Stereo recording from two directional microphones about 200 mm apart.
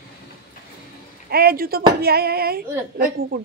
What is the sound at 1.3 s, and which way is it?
Speech, 50° right (ahead or behind).